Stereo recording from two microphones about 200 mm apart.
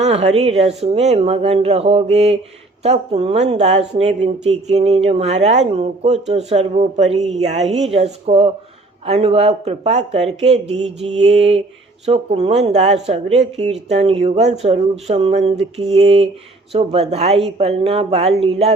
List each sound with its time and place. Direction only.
0.0 s speech: 30° right (ahead or behind)